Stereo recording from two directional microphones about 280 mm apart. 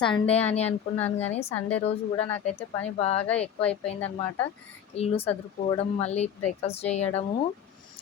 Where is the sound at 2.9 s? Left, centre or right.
Left.